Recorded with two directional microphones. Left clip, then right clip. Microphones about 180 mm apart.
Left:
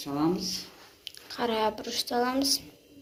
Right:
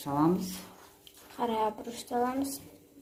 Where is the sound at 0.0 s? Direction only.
70° right (ahead or behind).